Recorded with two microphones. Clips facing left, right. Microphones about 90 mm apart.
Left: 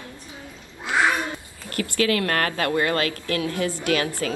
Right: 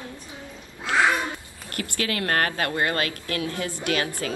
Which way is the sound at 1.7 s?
30° right (ahead or behind).